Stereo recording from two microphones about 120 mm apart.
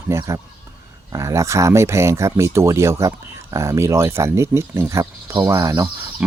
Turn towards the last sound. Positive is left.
turn(degrees=-25)  # may be behind; listen again after turning